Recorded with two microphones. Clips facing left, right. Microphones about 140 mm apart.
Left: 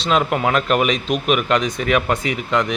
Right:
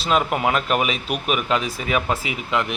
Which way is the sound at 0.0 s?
5° right (ahead or behind).